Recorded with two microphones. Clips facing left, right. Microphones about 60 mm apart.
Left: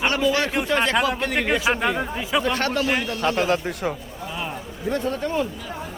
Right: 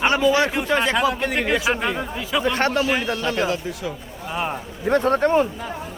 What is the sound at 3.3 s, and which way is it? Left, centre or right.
Speech, left.